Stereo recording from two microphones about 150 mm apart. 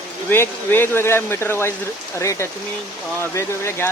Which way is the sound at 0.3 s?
15° left (ahead or behind).